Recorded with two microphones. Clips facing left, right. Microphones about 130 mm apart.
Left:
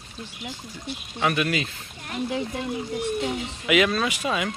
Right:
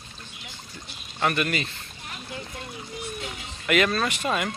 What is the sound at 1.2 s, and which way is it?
Speech, 5° left (ahead or behind).